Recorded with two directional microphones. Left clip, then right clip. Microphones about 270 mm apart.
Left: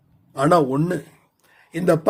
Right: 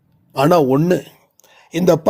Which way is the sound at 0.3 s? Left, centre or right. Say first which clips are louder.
Right 4 dB; right.